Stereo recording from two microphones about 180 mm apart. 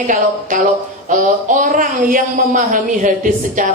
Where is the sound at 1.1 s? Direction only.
45° right (ahead or behind).